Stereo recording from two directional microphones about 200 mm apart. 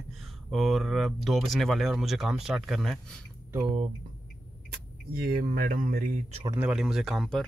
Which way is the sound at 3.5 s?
25° right (ahead or behind).